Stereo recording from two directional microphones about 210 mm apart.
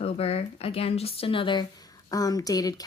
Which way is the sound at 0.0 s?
30° left (ahead or behind).